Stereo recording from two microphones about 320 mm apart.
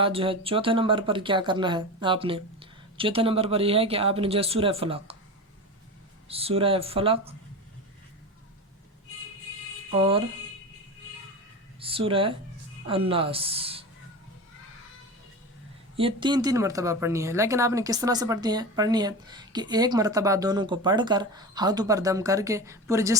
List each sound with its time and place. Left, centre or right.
0.0 s speech: centre
6.2 s speech: centre
9.9 s speech: centre
11.8 s speech: centre
16.0 s speech: centre